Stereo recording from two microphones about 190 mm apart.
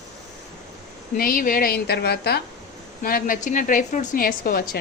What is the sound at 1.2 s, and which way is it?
A woman's voice, 50° left (ahead or behind).